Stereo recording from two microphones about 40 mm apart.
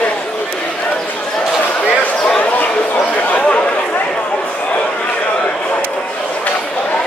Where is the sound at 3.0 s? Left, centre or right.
Left.